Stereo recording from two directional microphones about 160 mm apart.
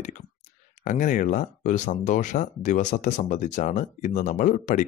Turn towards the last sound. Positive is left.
turn(degrees=50)  # may be behind; listen again after turning